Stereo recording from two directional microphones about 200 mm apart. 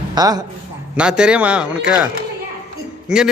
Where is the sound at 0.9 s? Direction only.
5° right (ahead or behind).